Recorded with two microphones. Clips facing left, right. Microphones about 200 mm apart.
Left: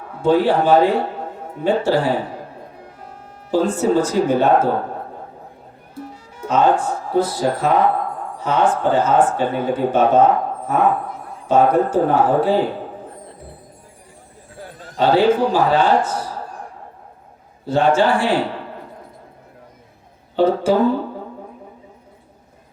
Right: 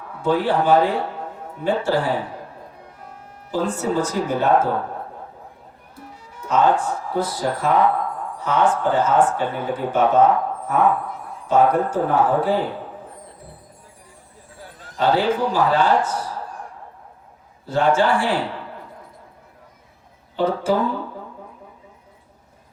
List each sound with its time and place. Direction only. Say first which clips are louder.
0.2 s speech: left 4 dB; 30° left (ahead or behind)
3.5 s speech: left 5 dB; 30° left (ahead or behind)
6.4 s speech: left 2 dB; 25° left (ahead or behind)
11.4 s speech: left 2 dB; 25° left (ahead or behind)
14.9 s speech: left 4 dB; 30° left (ahead or behind)
17.7 s speech: left 2 dB; 25° left (ahead or behind)
20.4 s speech: left 5 dB; 30° left (ahead or behind)